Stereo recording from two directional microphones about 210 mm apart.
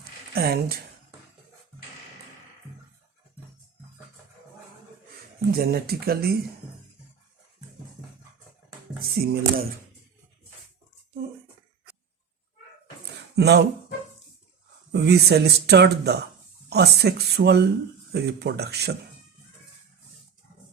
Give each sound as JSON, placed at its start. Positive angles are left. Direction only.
{"t": 0.3, "sound": "speech", "side_deg": -45}
{"t": 5.5, "sound": "speech", "side_deg": -45}
{"t": 9.0, "sound": "speech", "side_deg": -45}
{"t": 13.3, "sound": "speech", "side_deg": -50}
{"t": 14.9, "sound": "speech", "side_deg": -50}